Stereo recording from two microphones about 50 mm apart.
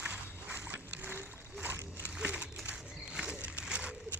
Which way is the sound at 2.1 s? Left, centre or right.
Right.